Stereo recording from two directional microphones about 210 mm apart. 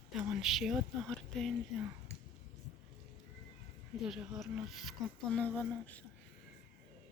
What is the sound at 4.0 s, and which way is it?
Speech, centre (ahead or behind).